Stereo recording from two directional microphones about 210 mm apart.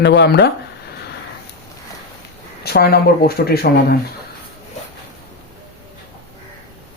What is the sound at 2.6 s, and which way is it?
Speech, 50° left (ahead or behind).